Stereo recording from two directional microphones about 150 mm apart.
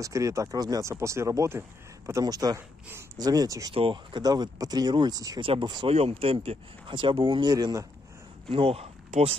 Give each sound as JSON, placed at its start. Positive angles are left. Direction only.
{"t": 0.0, "sound": "speech", "side_deg": -20}
{"t": 3.7, "sound": "speech", "side_deg": -35}
{"t": 5.9, "sound": "speech", "side_deg": -45}
{"t": 8.5, "sound": "speech", "side_deg": -40}
{"t": 9.1, "sound": "speech", "side_deg": -55}